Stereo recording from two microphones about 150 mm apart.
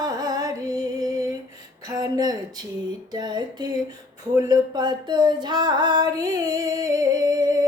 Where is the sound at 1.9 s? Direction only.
25° right (ahead or behind).